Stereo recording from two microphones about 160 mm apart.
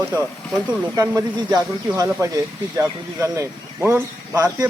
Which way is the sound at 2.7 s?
15° right (ahead or behind).